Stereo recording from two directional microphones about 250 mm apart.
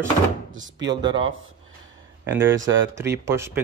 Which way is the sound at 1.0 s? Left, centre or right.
Centre.